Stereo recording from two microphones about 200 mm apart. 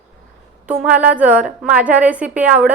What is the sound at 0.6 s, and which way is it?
A woman's voice, 5° right (ahead or behind).